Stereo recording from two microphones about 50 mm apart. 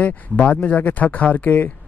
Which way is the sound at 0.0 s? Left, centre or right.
Left.